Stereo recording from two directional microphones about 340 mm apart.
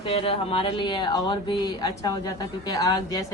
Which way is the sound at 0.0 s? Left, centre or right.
Centre.